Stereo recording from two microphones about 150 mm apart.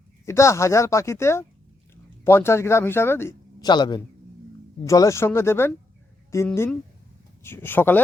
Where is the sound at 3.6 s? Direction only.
30° left (ahead or behind).